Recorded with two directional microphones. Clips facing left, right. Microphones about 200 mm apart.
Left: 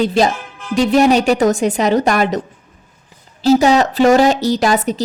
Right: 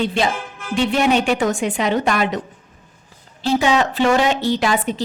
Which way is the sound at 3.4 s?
40° left (ahead or behind).